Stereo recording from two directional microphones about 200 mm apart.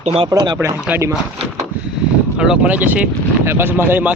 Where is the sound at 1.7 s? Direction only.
10° right (ahead or behind).